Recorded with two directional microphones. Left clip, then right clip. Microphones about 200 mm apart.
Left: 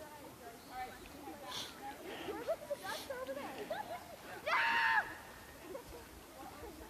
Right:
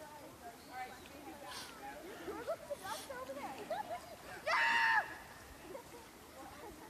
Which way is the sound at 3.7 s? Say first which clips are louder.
Right 3 dB; 55° right (ahead or behind).